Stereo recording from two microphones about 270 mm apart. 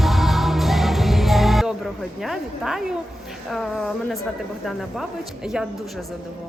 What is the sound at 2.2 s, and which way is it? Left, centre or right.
Speech, centre.